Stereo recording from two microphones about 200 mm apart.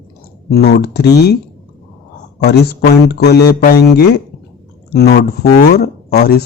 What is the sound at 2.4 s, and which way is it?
Speech, 55° left (ahead or behind).